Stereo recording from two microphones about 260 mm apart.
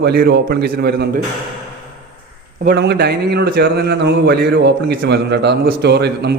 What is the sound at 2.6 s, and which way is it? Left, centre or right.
A man's voice, right.